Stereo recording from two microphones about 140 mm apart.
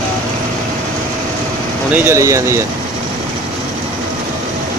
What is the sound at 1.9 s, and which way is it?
Speech, 20° right (ahead or behind).